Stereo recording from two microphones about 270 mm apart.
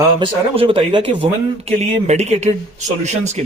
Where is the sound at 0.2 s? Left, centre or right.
Centre.